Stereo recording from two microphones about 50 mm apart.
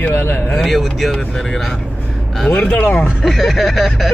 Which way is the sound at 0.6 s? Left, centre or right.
Centre.